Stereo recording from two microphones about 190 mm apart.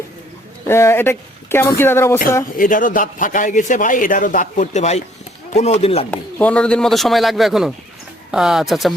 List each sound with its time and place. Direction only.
0.7 s speech: 15° left (ahead or behind)
2.6 s a man's voice: 45° left (ahead or behind)
6.1 s speech: 5° left (ahead or behind)